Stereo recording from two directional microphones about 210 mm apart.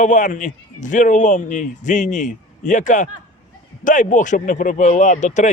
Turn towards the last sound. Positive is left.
turn(degrees=35)  # may be behind; listen again after turning